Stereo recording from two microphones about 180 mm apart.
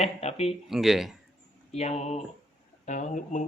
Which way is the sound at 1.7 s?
40° left (ahead or behind).